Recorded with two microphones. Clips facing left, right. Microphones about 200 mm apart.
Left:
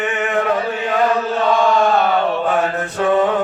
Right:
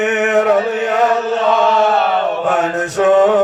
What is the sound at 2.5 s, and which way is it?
Mantra, 80° right.